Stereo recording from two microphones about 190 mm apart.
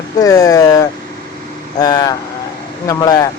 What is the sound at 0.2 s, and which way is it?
Speech, 20° left (ahead or behind).